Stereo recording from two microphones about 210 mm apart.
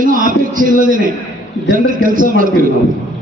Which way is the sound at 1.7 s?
40° right (ahead or behind).